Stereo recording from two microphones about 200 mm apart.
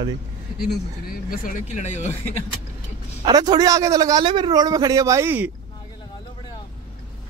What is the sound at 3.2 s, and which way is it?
A man's voice, 20° right (ahead or behind).